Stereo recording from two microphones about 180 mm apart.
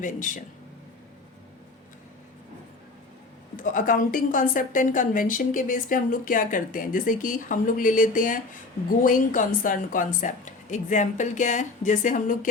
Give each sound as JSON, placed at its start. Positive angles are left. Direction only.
{"t": 0.0, "sound": "a woman's voice", "side_deg": 45}
{"t": 3.6, "sound": "a woman's voice", "side_deg": 50}